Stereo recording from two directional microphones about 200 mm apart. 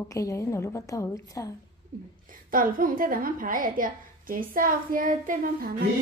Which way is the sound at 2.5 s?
45° right (ahead or behind).